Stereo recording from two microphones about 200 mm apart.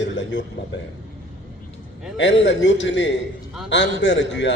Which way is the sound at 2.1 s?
65° left (ahead or behind).